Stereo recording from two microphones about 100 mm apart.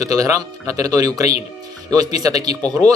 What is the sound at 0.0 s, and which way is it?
Speech, 35° right (ahead or behind).